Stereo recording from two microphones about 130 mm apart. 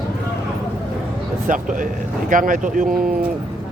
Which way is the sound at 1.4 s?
90° right.